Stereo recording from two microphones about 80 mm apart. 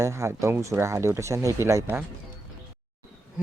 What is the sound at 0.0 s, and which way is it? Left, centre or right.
Speech, right.